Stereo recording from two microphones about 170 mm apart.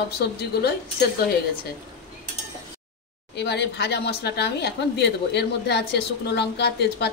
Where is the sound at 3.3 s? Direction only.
85° left.